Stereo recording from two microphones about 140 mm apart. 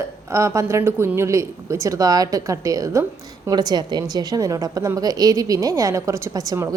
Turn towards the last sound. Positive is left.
turn(degrees=-20)  # may be behind; listen again after turning